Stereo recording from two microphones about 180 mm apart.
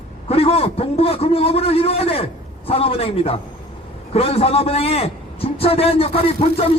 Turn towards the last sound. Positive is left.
turn(degrees=35)  # may be behind; listen again after turning